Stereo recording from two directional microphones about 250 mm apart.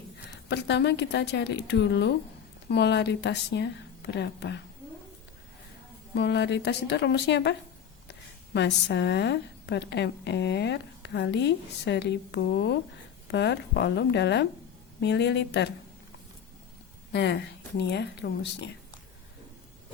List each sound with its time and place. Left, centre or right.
0.4 s a woman's voice: left
6.1 s a woman's voice: left
8.5 s a woman's voice: left
17.1 s a woman's voice: left